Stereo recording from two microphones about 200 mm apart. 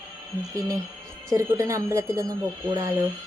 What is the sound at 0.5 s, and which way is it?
Speech, 20° right (ahead or behind).